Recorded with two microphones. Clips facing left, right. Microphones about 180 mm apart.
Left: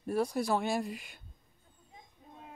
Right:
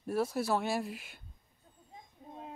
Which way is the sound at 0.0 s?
5° right (ahead or behind).